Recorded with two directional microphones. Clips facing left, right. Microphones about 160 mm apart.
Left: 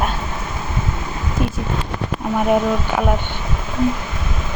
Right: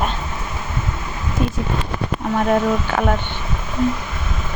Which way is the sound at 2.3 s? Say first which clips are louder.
Left 1 dB; 5° left (ahead or behind).